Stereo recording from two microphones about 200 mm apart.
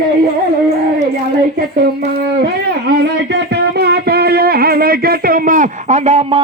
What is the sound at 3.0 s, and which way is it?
Music, 60° right (ahead or behind).